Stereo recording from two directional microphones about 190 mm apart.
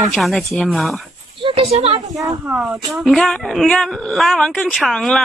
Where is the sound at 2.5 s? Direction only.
5° right (ahead or behind).